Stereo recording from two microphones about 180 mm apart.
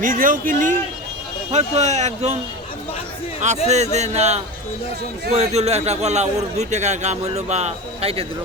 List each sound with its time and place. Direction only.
0.0 s a man's voice: 50° right (ahead or behind)
3.4 s a man's voice: 40° right (ahead or behind)